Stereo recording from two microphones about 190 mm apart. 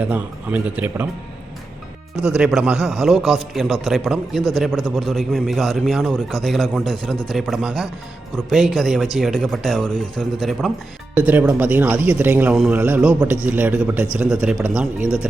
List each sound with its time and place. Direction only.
0.0 s a man's voice: 10° right (ahead or behind)
2.2 s a man's voice: 5° right (ahead or behind)